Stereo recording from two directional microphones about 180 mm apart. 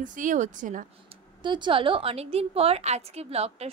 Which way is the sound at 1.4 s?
25° right (ahead or behind).